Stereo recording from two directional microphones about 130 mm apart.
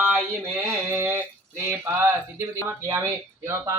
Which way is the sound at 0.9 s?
20° right (ahead or behind).